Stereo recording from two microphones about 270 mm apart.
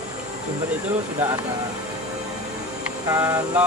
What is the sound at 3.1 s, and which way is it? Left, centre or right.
Speech, centre.